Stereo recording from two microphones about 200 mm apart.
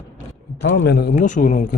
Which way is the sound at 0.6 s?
60° left (ahead or behind).